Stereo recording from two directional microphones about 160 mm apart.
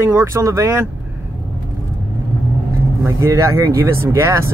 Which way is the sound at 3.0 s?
20° right (ahead or behind).